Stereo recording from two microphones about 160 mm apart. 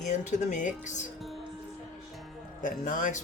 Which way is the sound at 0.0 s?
50° left (ahead or behind).